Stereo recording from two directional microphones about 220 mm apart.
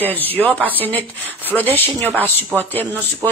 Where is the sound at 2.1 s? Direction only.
10° right (ahead or behind).